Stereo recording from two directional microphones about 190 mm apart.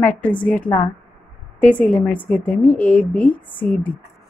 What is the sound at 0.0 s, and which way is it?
A woman's voice, 5° left (ahead or behind).